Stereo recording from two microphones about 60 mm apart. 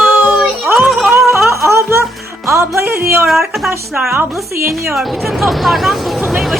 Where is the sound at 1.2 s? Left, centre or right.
Centre.